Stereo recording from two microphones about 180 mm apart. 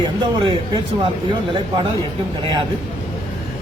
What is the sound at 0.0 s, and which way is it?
A man's voice, 25° right (ahead or behind).